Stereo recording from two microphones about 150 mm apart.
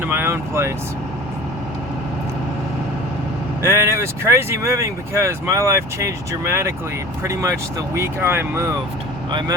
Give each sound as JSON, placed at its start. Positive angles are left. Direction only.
{"t": 0.0, "sound": "speech", "side_deg": -15}
{"t": 3.6, "sound": "speech", "side_deg": -15}